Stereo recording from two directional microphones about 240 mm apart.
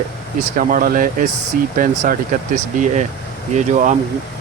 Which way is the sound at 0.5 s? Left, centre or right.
Right.